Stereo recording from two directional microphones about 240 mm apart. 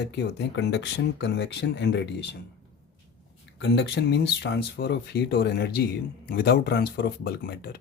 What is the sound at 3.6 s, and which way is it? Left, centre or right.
Speech, left.